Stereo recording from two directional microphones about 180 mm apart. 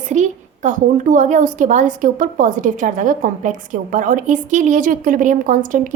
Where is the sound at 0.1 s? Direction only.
40° right (ahead or behind).